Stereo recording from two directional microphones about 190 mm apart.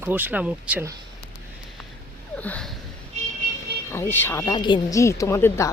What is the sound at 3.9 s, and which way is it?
Speech, 10° left (ahead or behind).